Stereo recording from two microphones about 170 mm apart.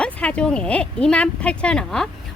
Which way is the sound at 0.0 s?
5° left (ahead or behind).